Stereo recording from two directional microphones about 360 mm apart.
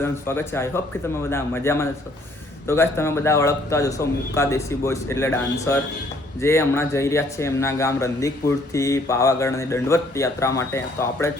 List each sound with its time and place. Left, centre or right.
0.0 s speech: centre